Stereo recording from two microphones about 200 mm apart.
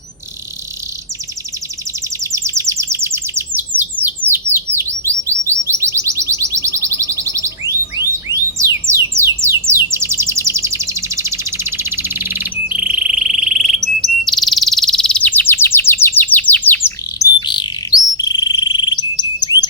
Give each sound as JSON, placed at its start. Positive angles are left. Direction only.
{"t": 2.2, "sound": "bird", "side_deg": -15}
{"t": 4.3, "sound": "chirp", "side_deg": -10}
{"t": 8.5, "sound": "music", "side_deg": -15}
{"t": 9.4, "sound": "bird", "side_deg": -10}
{"t": 14.0, "sound": "chirp", "side_deg": 0}
{"t": 17.4, "sound": "bird", "side_deg": 20}